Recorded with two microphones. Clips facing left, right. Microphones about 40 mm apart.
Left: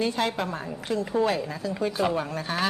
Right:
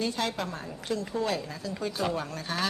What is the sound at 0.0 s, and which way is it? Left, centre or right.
A woman's voice, left.